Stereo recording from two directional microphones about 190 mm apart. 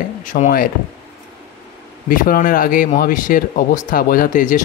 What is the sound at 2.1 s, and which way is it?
A man's voice, 45° left (ahead or behind).